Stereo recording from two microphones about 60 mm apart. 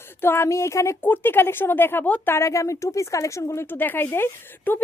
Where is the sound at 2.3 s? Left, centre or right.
Left.